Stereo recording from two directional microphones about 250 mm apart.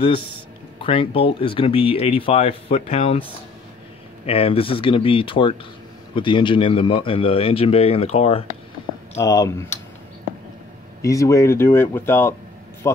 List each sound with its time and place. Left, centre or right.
0.7 s a man's voice: left
4.3 s a man's voice: left
9.2 s speech: centre
11.0 s speech: centre